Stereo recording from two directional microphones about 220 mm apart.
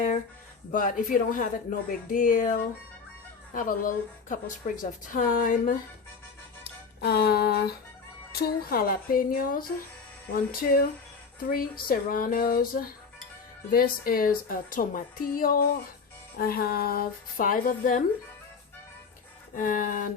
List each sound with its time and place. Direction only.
0.7 s a woman's voice: 40° left (ahead or behind)
7.0 s music: 50° left (ahead or behind)
8.3 s a woman's voice: 45° left (ahead or behind)
11.9 s a woman's voice: 40° left (ahead or behind)
19.5 s a woman's voice: 35° left (ahead or behind)